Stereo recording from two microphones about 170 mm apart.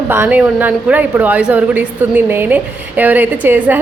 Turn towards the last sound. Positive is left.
turn(degrees=-10)  # may be behind; listen again after turning